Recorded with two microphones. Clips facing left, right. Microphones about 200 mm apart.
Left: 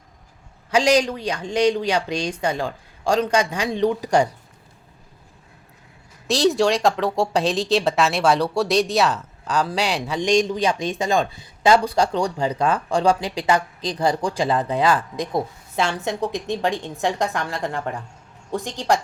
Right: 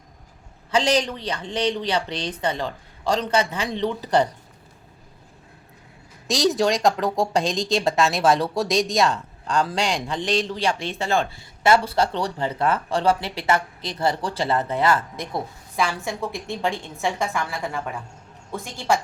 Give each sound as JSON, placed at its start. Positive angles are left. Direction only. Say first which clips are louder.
{"t": 0.7, "sound": "a woman's voice", "louder": "left 3 dB", "side_deg": 10}
{"t": 6.2, "sound": "a woman's voice", "louder": "left 2 dB", "side_deg": 0}
{"t": 18.5, "sound": "a woman's voice", "louder": "left 2 dB", "side_deg": 15}